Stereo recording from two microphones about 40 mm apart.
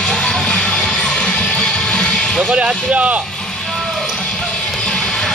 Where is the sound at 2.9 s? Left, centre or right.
Right.